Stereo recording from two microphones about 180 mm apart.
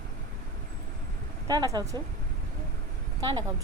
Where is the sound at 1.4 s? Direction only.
20° right (ahead or behind).